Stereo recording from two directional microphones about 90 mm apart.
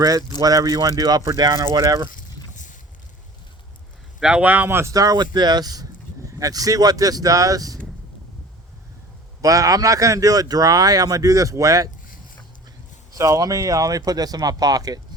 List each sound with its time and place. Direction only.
0.0 s speech: 40° right (ahead or behind)
4.2 s speech: 10° right (ahead or behind); by 4.9 s 25° right (ahead or behind)
4.9 s speech: 45° right (ahead or behind)
9.4 s speech: 40° right (ahead or behind)
13.1 s speech: 40° right (ahead or behind)